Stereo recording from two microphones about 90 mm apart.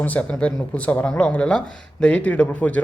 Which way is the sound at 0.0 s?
15° left (ahead or behind).